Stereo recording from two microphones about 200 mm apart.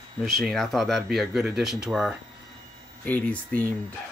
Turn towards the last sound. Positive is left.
turn(degrees=10)  # may be behind; listen again after turning